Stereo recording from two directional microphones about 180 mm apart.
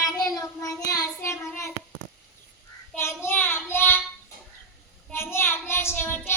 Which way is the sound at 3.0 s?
15° left (ahead or behind).